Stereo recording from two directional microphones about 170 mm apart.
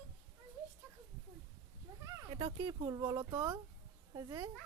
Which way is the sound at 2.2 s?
35° right (ahead or behind).